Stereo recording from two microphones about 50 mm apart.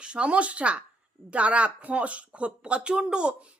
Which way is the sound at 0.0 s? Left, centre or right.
Right.